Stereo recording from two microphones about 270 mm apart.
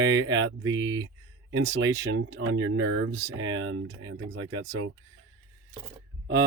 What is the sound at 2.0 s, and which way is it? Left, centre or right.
Speech, right.